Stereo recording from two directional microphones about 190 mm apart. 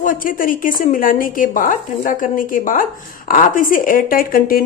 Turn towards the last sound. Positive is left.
turn(degrees=50)  # may be behind; listen again after turning